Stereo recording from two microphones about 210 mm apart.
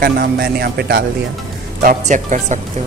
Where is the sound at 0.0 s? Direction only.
50° right (ahead or behind).